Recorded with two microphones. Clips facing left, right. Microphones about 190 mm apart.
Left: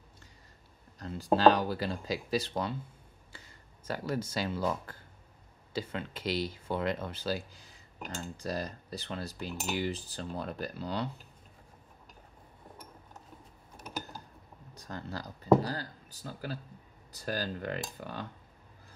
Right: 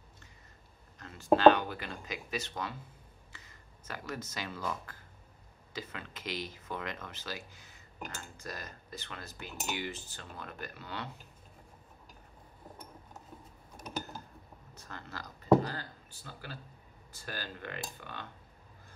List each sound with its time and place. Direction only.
0.9 s speech: 35° left (ahead or behind)
14.7 s speech: 35° left (ahead or behind)